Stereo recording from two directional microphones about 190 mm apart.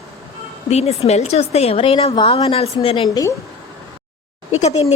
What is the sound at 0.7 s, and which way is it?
A woman's voice, 35° left (ahead or behind).